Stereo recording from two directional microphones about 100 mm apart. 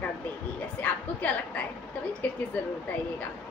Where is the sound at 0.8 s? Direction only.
15° left (ahead or behind).